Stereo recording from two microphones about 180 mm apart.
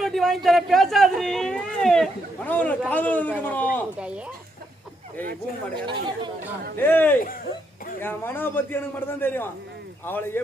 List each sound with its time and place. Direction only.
0.0 s a man's voice: centre (ahead or behind)
5.7 s speech: 25° right (ahead or behind)
6.7 s a man's voice: 10° left (ahead or behind)